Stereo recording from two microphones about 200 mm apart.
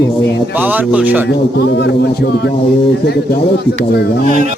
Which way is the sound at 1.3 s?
60° left (ahead or behind).